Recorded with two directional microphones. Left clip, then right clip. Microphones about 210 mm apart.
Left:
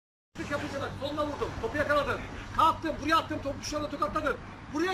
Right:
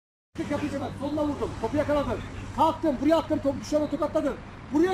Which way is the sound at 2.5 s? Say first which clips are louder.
Right 2 dB; 30° right (ahead or behind).